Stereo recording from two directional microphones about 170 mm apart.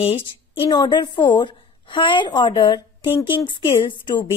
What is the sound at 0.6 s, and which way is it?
A woman's voice, 25° left (ahead or behind).